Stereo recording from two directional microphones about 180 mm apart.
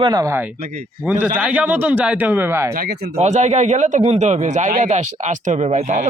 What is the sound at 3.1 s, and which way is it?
Speech, 40° right (ahead or behind).